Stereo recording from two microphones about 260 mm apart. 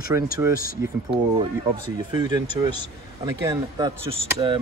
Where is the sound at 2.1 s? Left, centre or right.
Centre.